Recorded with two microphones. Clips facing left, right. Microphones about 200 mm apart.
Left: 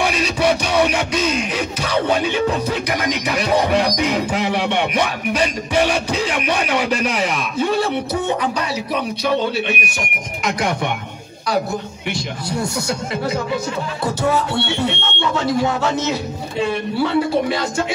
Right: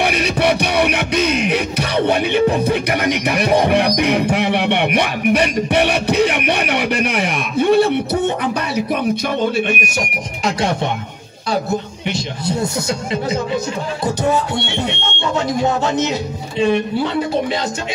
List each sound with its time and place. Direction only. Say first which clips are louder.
0.0 s music: right 1 dB; 60° right (ahead or behind); by 10.5 s 40° right (ahead or behind)
12.4 s speech: right 3 dB; 20° right (ahead or behind)